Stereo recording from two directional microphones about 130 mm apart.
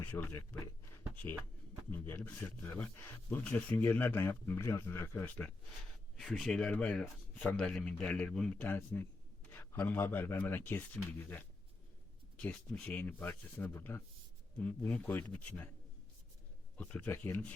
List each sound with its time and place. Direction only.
0.1 s speech: 15° left (ahead or behind)
6.1 s speech: centre (ahead or behind)
16.7 s a man's voice: 10° left (ahead or behind)